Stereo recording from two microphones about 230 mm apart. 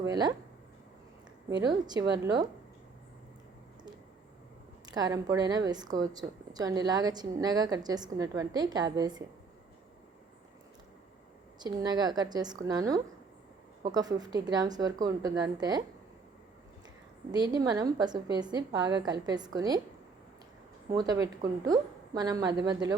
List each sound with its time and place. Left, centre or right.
0.0 s a woman's voice: centre
1.6 s a woman's voice: centre
4.9 s a woman's voice: centre
11.6 s a woman's voice: centre
17.3 s a woman's voice: centre
20.9 s a woman's voice: centre